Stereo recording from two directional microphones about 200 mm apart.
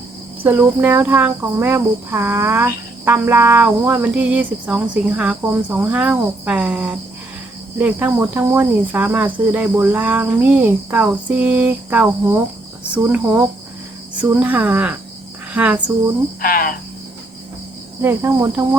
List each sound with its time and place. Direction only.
0.4 s cricket: 10° right (ahead or behind)
16.4 s cricket: 45° left (ahead or behind)
18.0 s cricket: 10° right (ahead or behind)